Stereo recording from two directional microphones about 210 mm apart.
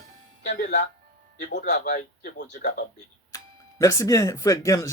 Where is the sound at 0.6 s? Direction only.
55° left (ahead or behind).